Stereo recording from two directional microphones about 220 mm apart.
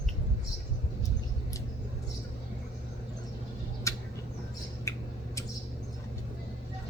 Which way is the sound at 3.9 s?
15° left (ahead or behind).